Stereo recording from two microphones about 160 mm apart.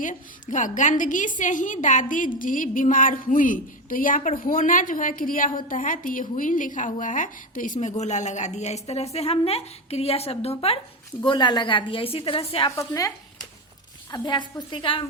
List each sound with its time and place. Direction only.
0.0 s a woman's voice: 50° left (ahead or behind); by 12.7 s 35° left (ahead or behind)
12.7 s a woman's voice: 20° left (ahead or behind)